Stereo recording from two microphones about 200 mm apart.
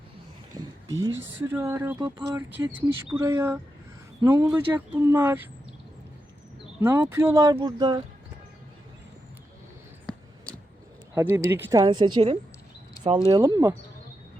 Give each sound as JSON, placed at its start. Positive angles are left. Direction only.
{"t": 0.5, "sound": "speech", "side_deg": -20}
{"t": 6.8, "sound": "speech", "side_deg": -10}
{"t": 11.1, "sound": "speech", "side_deg": -15}
{"t": 13.4, "sound": "speech", "side_deg": -15}